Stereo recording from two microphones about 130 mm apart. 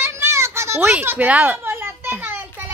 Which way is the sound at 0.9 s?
15° right (ahead or behind).